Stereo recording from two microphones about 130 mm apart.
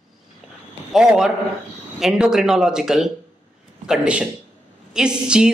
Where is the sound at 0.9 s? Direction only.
5° right (ahead or behind).